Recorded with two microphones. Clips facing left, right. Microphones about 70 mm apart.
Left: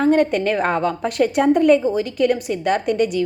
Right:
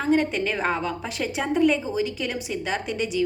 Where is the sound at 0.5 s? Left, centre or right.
Centre.